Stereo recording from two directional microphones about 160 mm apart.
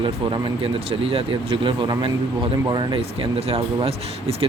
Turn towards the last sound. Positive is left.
turn(degrees=-35)  # may be behind; listen again after turning